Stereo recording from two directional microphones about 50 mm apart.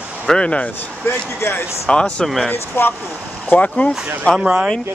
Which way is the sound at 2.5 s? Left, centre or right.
Left.